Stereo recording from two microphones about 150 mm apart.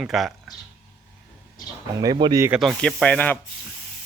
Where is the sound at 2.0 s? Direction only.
30° right (ahead or behind).